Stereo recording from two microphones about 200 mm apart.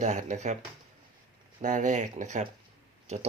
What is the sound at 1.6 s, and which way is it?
Speech, 40° right (ahead or behind).